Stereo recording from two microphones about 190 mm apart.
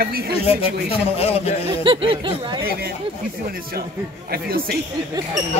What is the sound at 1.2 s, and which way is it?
Speech, 35° left (ahead or behind).